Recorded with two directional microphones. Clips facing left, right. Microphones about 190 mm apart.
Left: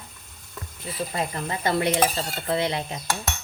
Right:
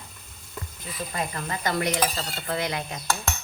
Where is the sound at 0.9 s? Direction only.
25° left (ahead or behind).